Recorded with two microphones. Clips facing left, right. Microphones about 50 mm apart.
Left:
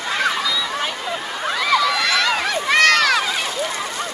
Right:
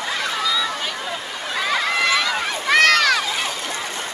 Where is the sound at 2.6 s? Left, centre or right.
Centre.